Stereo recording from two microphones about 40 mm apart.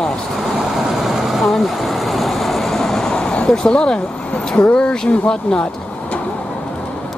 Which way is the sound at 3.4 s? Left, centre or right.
Centre.